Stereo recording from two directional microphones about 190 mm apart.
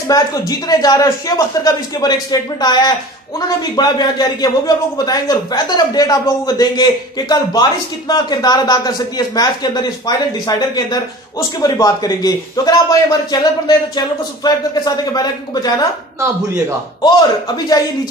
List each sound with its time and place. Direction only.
0.1 s speech: 20° left (ahead or behind)